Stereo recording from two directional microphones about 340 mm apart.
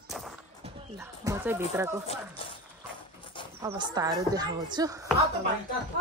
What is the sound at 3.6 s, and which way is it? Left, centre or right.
Speech, centre.